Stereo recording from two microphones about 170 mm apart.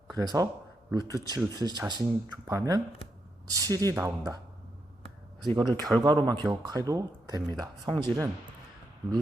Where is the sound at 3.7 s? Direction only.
15° left (ahead or behind).